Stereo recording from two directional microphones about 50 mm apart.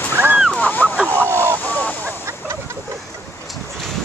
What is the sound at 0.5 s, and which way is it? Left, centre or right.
Splash, left.